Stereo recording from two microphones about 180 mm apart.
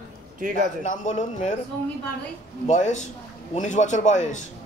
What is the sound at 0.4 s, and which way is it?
Speech, 45° right (ahead or behind).